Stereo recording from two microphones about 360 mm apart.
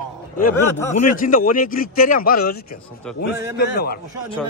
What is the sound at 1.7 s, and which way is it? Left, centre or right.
Speech, left.